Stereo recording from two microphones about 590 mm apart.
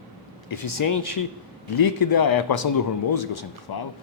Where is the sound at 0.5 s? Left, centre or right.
Left.